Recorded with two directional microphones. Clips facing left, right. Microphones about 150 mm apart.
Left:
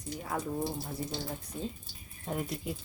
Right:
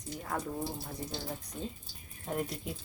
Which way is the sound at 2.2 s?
Centre (ahead or behind).